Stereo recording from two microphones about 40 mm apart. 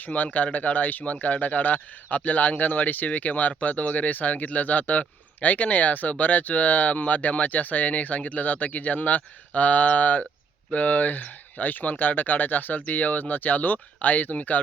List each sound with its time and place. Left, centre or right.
0.1 s speech: left